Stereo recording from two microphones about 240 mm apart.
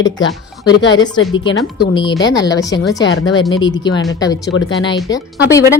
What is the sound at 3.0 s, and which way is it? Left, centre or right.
Speech, left.